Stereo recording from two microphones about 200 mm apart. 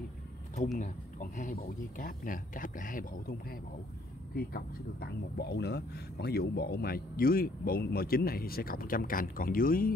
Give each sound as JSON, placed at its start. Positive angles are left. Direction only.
{"t": 0.7, "sound": "speech", "side_deg": 40}